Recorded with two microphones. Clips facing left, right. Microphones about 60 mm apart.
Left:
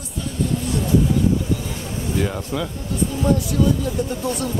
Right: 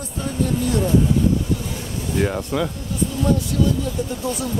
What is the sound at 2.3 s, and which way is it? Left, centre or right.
Speech, centre.